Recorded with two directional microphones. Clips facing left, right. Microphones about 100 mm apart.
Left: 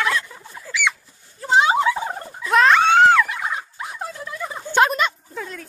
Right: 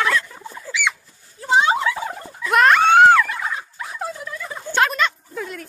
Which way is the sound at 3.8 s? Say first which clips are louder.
Right 2 dB; 25° left (ahead or behind).